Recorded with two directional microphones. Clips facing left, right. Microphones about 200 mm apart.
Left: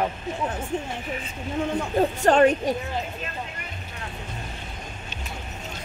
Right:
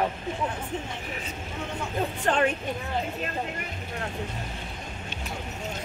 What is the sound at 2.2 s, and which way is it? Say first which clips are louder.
Speech: left 7 dB; 40° left (ahead or behind).